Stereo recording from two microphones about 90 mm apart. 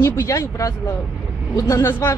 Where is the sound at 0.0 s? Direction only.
35° left (ahead or behind).